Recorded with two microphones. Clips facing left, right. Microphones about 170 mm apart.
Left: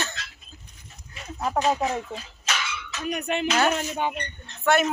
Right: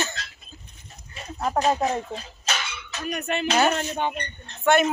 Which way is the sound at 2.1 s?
35° right (ahead or behind).